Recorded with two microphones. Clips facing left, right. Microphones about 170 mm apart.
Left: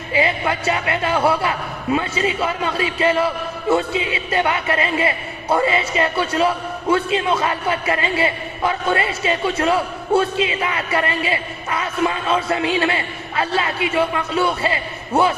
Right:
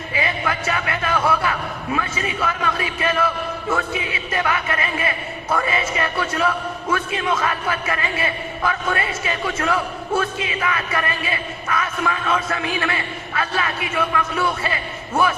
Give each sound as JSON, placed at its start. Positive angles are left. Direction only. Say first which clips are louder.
{"t": 0.1, "sound": "a man's voice", "louder": "left 5 dB", "side_deg": 25}